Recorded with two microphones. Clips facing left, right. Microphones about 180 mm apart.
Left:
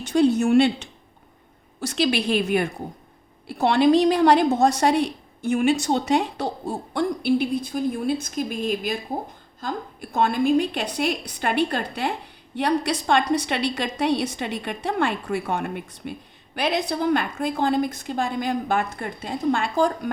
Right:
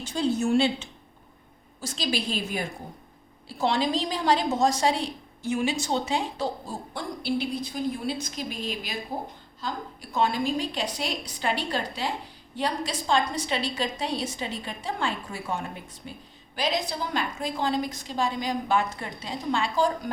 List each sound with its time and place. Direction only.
0.0 s a woman's voice: 65° left (ahead or behind)